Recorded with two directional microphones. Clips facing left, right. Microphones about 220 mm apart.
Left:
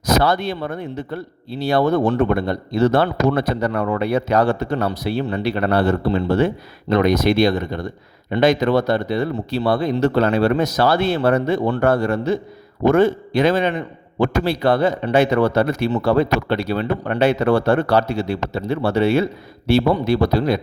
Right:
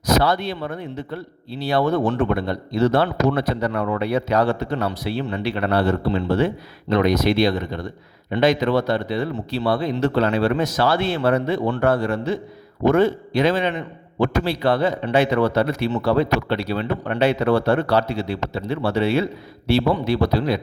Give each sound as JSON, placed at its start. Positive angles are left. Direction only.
{"t": 0.0, "sound": "speech", "side_deg": 50}